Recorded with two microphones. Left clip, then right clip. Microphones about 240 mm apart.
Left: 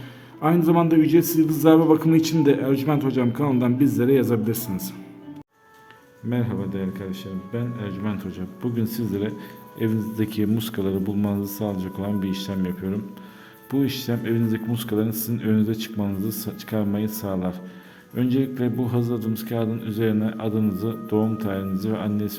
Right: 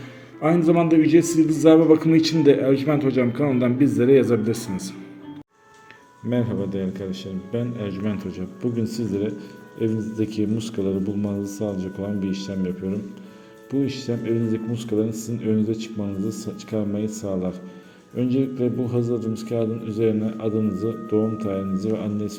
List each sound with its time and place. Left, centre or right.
0.4 s a man's voice: centre
6.3 s a man's voice: centre